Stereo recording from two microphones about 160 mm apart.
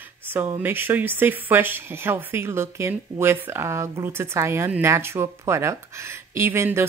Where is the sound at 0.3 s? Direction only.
10° right (ahead or behind).